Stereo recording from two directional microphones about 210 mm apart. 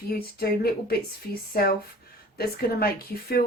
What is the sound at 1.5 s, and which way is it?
Speech, 45° left (ahead or behind).